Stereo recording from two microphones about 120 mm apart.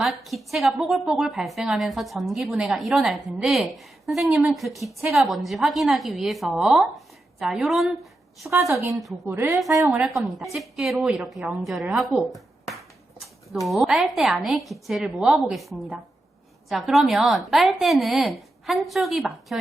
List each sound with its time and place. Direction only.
0.0 s a woman's voice: centre (ahead or behind)
8.4 s a woman's voice: 25° right (ahead or behind)
9.9 s a woman's voice: 5° right (ahead or behind)